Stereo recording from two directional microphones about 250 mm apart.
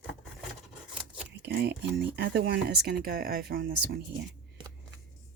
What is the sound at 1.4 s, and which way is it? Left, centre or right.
Speech, right.